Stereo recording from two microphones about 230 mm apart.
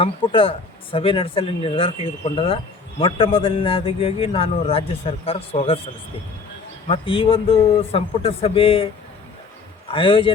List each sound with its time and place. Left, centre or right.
0.0 s a man's voice: left
9.9 s a man's voice: left